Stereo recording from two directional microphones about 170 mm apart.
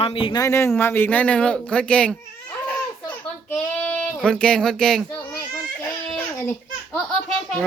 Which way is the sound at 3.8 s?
5° left (ahead or behind).